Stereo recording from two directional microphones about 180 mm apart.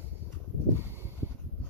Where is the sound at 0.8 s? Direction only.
10° right (ahead or behind).